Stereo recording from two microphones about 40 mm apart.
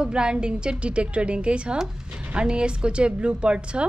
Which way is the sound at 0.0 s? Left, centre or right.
Right.